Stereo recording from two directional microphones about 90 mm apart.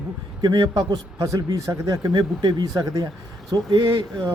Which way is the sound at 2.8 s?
40° right (ahead or behind).